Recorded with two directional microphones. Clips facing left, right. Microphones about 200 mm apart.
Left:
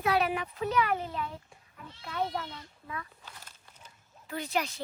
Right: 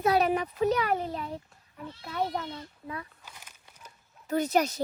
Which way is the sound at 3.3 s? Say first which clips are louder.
Even; 15° right (ahead or behind).